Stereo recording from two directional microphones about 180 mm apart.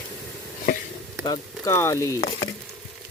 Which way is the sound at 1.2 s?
20° left (ahead or behind).